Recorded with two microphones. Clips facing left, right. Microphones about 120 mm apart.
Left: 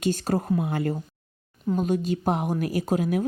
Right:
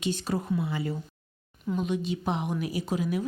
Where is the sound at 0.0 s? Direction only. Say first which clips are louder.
Left 5 dB; 45° left (ahead or behind).